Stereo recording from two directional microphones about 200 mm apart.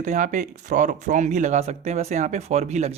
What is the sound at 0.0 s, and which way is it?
Speech, 40° right (ahead or behind).